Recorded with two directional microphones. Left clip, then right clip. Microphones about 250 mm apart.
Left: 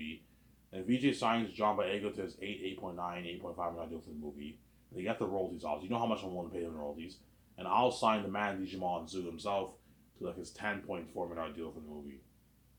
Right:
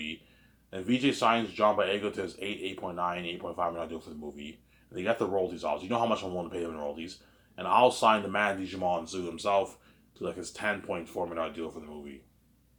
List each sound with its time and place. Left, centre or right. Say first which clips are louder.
0.7 s speech: right 5 dB; right
4.9 s speech: right 7 dB; right